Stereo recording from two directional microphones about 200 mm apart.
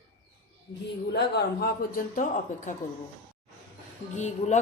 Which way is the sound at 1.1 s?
55° left (ahead or behind).